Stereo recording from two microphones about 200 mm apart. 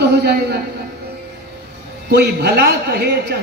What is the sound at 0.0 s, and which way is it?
Speech, 55° right (ahead or behind).